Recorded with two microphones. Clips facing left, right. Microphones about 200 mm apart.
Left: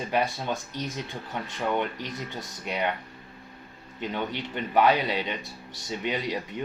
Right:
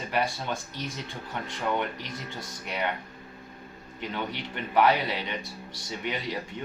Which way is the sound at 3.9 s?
20° left (ahead or behind).